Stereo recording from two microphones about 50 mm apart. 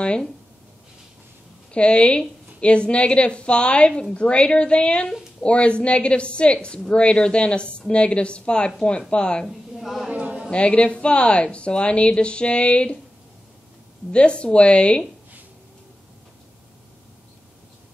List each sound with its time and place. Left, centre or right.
1.7 s a woman's voice: left
9.5 s a woman's voice: centre
10.0 s a sound: right
10.5 s a woman's voice: left
14.1 s a woman's voice: left